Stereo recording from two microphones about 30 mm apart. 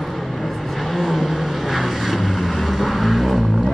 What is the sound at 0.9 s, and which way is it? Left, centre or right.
Vehicle, centre.